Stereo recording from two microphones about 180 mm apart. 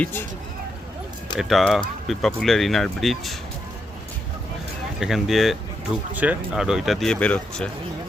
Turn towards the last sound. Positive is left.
turn(degrees=5)  # may be behind; listen again after turning